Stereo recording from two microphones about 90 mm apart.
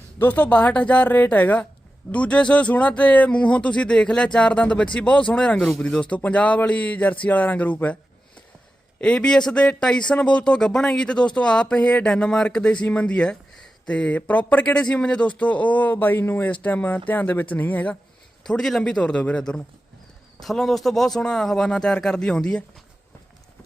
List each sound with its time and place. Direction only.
0.2 s a man's voice: 15° left (ahead or behind)
9.0 s a man's voice: 10° left (ahead or behind)
18.4 s a man's voice: 5° left (ahead or behind)